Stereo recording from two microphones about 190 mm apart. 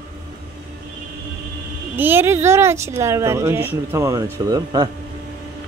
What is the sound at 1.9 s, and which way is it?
Speech, 10° right (ahead or behind).